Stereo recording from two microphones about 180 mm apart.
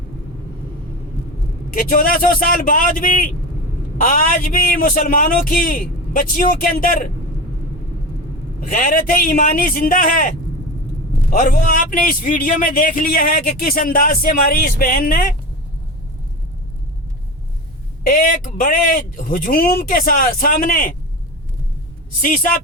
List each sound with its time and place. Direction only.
1.7 s a man's voice: 50° left (ahead or behind)
8.6 s a man's voice: 50° left (ahead or behind)
18.0 s a man's voice: 55° left (ahead or behind)
22.2 s a man's voice: 50° left (ahead or behind)